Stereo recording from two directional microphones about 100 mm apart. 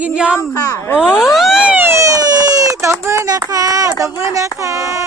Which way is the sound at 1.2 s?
Centre (ahead or behind).